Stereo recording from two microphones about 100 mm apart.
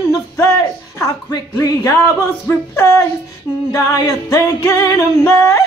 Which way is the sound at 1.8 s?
30° left (ahead or behind).